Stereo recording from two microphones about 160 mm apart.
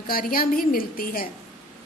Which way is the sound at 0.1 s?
65° left (ahead or behind).